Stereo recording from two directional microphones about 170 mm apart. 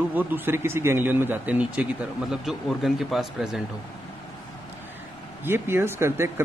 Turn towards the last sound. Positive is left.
turn(degrees=-15)  # may be behind; listen again after turning